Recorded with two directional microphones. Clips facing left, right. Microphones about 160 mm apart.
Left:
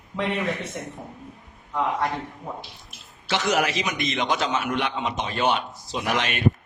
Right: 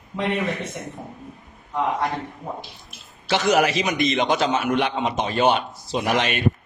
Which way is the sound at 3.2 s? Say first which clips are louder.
Right 4 dB; 35° right (ahead or behind).